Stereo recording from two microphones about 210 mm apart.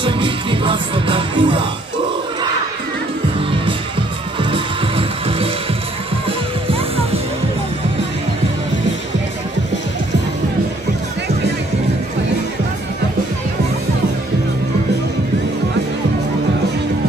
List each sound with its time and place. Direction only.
0.0 s music: 25° right (ahead or behind)
4.4 s music: 25° right (ahead or behind)